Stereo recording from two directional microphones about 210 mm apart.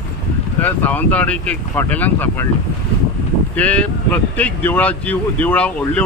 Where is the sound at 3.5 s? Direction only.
5° left (ahead or behind).